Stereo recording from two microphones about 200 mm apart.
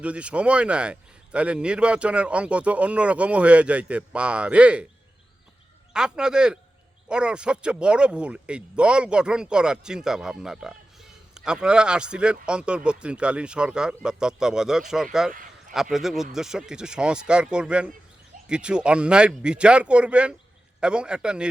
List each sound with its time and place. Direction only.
0.0 s speech: 5° right (ahead or behind)
5.9 s speech: 5° right (ahead or behind)
15.3 s a sound: 40° right (ahead or behind)
15.7 s speech: centre (ahead or behind)